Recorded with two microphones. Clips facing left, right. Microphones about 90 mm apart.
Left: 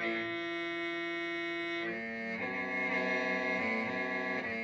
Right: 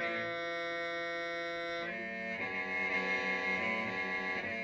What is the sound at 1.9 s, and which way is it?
Music, 15° left (ahead or behind).